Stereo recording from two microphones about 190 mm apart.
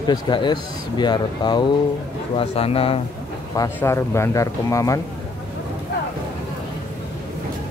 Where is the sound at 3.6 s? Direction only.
15° left (ahead or behind).